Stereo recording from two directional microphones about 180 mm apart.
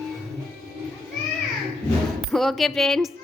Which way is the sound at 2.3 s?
Centre (ahead or behind).